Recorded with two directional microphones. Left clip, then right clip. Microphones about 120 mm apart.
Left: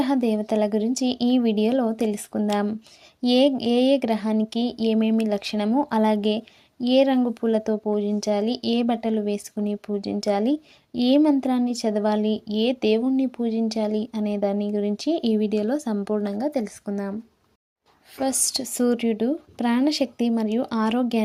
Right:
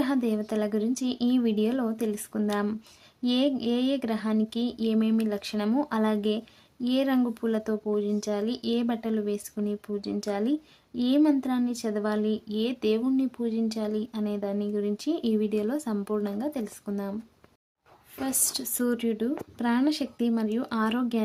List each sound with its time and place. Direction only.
0.0 s speech: 35° left (ahead or behind)
5.6 s speech: 20° left (ahead or behind)
5.9 s speech: 40° left (ahead or behind)
18.2 s speech: 40° left (ahead or behind)